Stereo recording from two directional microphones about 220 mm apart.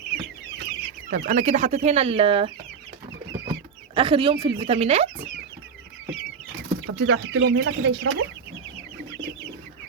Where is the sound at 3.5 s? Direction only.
25° right (ahead or behind).